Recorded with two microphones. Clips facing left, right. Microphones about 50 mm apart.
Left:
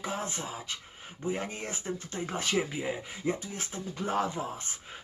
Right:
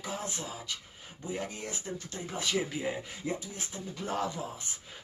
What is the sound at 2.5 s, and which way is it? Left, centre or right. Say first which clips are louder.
Speech: left 1 dB; centre.